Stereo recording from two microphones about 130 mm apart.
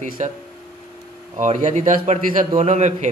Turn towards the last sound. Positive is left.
turn(degrees=-65)  # may be behind; listen again after turning